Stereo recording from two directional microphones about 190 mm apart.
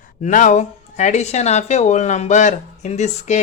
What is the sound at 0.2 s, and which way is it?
Speech, 40° left (ahead or behind).